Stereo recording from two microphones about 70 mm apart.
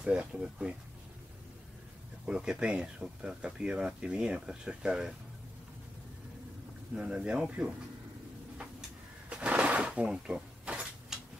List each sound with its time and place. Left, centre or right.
0.0 s speech: centre
2.2 s speech: centre
7.0 s speech: centre
9.3 s a sound: centre
10.0 s cutlery: centre